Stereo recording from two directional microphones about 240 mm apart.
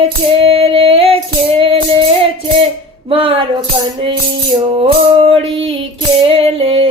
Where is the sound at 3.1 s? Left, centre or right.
Right.